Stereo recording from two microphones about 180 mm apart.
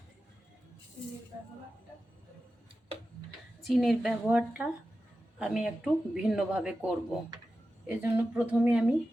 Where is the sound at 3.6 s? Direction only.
Centre (ahead or behind).